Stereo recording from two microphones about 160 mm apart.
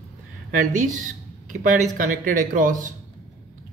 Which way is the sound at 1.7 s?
50° right (ahead or behind).